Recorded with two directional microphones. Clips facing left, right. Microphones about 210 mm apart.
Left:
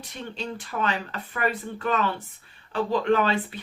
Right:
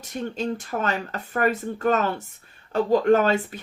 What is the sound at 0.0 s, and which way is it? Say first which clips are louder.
Speech: right 7 dB; 45° right (ahead or behind).